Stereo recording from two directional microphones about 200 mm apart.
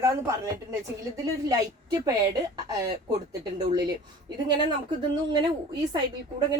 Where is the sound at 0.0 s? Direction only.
15° right (ahead or behind).